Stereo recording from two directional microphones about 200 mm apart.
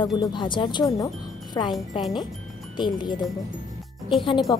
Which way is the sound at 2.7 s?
20° left (ahead or behind).